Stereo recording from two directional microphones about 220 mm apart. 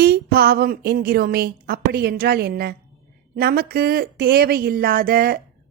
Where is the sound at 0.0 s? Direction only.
45° right (ahead or behind).